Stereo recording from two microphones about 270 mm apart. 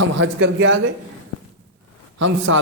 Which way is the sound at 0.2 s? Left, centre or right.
Right.